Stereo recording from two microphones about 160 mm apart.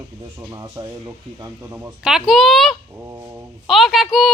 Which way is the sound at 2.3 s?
Centre (ahead or behind).